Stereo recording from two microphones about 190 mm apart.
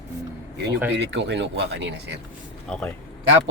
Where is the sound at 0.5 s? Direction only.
65° right (ahead or behind).